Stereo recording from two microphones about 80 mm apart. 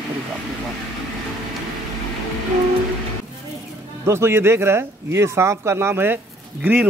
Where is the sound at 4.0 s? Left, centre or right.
Right.